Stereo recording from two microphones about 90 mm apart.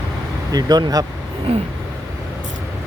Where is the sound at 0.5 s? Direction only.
50° right (ahead or behind).